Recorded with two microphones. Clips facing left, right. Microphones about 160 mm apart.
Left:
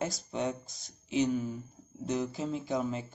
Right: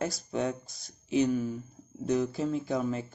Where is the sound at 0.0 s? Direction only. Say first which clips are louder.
Right 2 dB; 20° left (ahead or behind).